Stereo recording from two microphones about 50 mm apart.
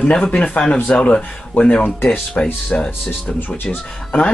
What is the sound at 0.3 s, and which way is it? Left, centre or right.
Speech, left.